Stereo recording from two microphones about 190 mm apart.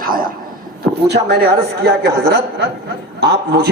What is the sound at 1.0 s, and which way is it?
A man's voice, 60° right (ahead or behind).